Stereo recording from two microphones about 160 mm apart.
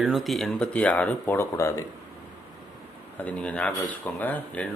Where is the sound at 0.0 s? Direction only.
Centre (ahead or behind); by 1.8 s 20° left (ahead or behind).